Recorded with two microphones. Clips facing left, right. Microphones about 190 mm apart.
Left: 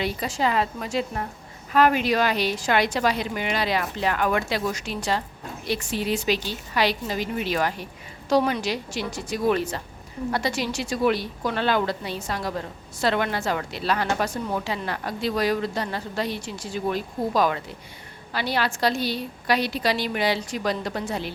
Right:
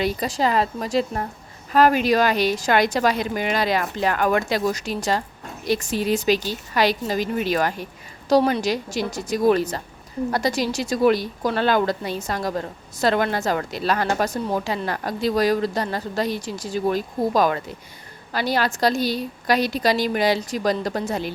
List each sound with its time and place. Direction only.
0.0 s a woman's voice: 40° right (ahead or behind)